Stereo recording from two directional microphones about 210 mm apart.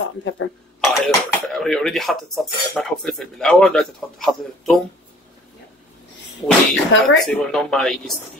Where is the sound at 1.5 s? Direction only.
Centre (ahead or behind).